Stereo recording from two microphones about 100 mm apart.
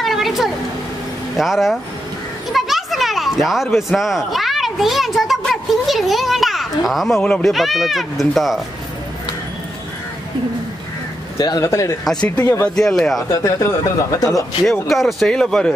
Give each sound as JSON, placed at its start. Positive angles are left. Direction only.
{"t": 0.0, "sound": "a sound", "side_deg": 0}
{"t": 1.3, "sound": "speech", "side_deg": 0}
{"t": 11.3, "sound": "speech", "side_deg": 40}
{"t": 12.0, "sound": "speech", "side_deg": 5}
{"t": 12.4, "sound": "speech", "side_deg": 20}
{"t": 12.7, "sound": "speech", "side_deg": 5}
{"t": 13.3, "sound": "speech", "side_deg": 30}
{"t": 14.6, "sound": "speech", "side_deg": 0}